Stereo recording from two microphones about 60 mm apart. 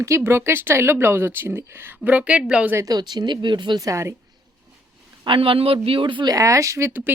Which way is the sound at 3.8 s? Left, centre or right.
Right.